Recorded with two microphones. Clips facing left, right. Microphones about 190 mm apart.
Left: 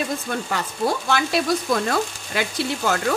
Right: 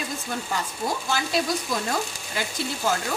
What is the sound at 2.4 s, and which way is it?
Speech, 70° left (ahead or behind).